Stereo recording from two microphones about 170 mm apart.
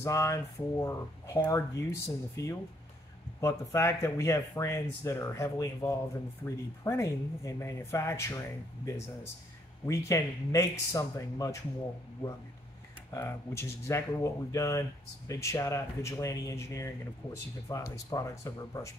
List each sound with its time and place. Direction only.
0.0 s speech: 20° left (ahead or behind)
13.1 s speech: 15° left (ahead or behind)